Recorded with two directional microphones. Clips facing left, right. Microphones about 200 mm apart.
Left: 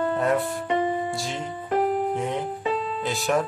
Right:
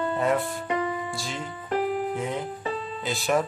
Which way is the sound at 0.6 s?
25° left (ahead or behind).